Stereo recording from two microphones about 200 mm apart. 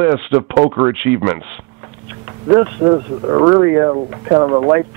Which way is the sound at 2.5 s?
20° right (ahead or behind).